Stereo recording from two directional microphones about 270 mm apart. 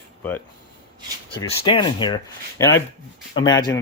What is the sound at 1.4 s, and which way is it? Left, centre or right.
Speech, centre.